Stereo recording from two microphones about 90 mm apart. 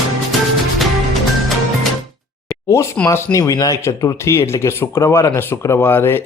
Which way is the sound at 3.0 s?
35° left (ahead or behind).